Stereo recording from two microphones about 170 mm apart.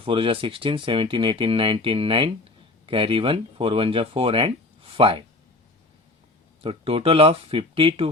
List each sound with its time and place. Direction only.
0.0 s speech: 30° right (ahead or behind)
6.6 s speech: 35° right (ahead or behind)